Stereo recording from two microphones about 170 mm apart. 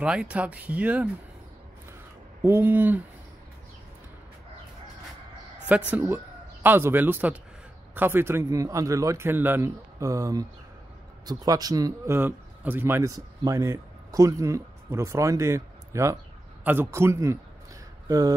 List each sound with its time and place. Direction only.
0.0 s a man's voice: 5° right (ahead or behind)
2.4 s a man's voice: 10° right (ahead or behind)
5.7 s a man's voice: 10° right (ahead or behind)